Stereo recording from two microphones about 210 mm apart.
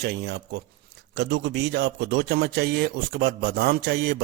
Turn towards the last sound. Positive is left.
turn(degrees=-50)  # may be behind; listen again after turning